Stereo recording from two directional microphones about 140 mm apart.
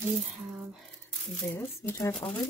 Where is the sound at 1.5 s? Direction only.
20° left (ahead or behind).